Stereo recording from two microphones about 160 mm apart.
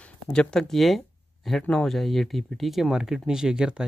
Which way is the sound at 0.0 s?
5° left (ahead or behind).